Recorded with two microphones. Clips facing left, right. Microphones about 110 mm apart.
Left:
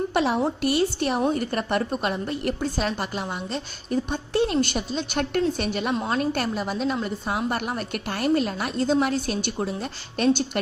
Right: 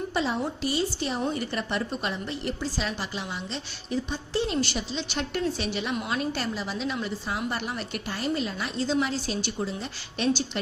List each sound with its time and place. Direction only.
0.1 s a woman's voice: 60° left (ahead or behind)
1.3 s a woman's voice: 50° left (ahead or behind)
5.9 s a woman's voice: 35° left (ahead or behind)
6.1 s a woman's voice: 55° left (ahead or behind)